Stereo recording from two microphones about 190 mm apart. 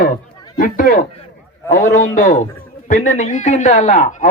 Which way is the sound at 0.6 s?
45° left (ahead or behind).